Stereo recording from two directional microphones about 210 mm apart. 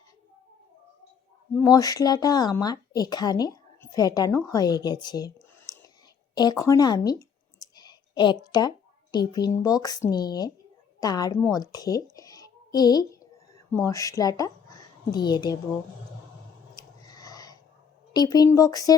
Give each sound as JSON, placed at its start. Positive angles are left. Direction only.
{"t": 1.5, "sound": "speech", "side_deg": 15}
{"t": 6.3, "sound": "clicking", "side_deg": 20}
{"t": 9.1, "sound": "speech", "side_deg": 20}
{"t": 12.1, "sound": "a sound", "side_deg": 15}
{"t": 13.8, "sound": "speech", "side_deg": 15}
{"t": 16.7, "sound": "a sound", "side_deg": 15}
{"t": 18.1, "sound": "speech", "side_deg": 20}